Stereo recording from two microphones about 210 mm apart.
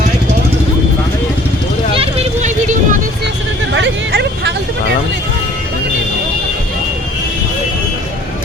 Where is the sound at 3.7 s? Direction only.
55° right (ahead or behind).